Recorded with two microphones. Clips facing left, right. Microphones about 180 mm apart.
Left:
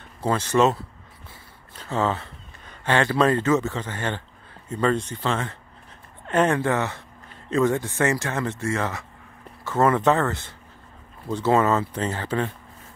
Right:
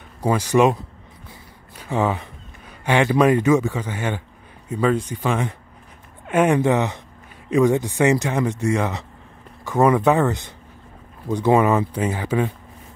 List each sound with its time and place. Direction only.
0.2 s speech: 10° right (ahead or behind)